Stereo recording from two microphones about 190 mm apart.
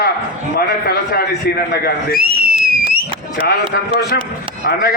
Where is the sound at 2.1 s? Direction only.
50° right (ahead or behind).